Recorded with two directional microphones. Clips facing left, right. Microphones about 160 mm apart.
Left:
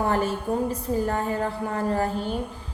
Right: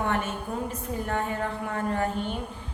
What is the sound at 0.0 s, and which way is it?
A woman's voice, 35° left (ahead or behind).